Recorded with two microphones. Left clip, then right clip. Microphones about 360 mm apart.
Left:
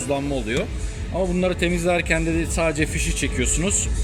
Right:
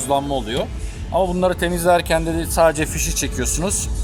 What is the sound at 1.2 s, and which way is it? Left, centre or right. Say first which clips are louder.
A man's voice: right 4 dB; right.